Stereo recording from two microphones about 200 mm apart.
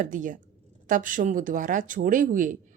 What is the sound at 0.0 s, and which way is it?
A woman's voice, 40° right (ahead or behind).